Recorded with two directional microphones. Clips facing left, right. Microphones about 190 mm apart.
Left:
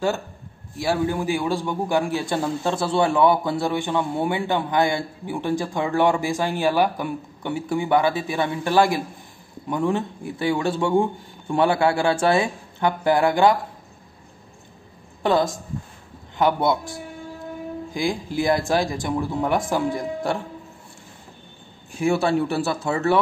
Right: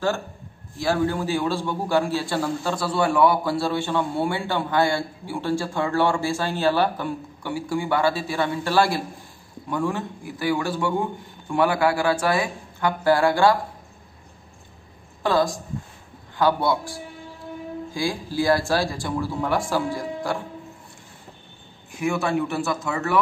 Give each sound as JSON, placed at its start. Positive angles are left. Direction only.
{"t": 0.7, "sound": "a man's voice", "side_deg": 15}
{"t": 15.2, "sound": "speech", "side_deg": 20}
{"t": 21.9, "sound": "a man's voice", "side_deg": 30}